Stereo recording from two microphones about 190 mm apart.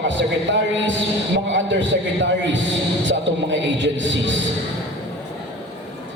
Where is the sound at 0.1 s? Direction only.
70° right (ahead or behind).